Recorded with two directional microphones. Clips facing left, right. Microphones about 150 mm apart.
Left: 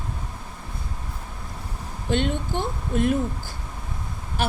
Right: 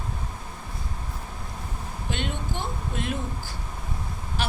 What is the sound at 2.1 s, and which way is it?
A woman's voice, 50° left (ahead or behind).